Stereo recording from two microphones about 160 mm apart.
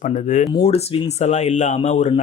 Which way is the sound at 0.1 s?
50° left (ahead or behind).